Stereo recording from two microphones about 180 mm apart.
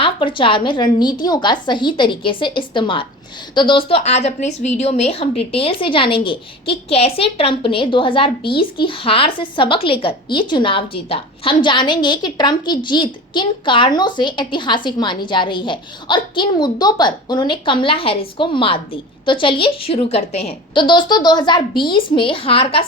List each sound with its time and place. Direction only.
0.0 s a woman's voice: 30° left (ahead or behind)